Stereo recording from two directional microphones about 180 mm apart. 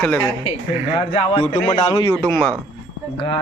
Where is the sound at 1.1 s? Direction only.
30° left (ahead or behind).